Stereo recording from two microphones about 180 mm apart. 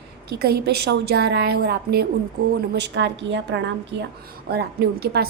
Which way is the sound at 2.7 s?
75° right (ahead or behind).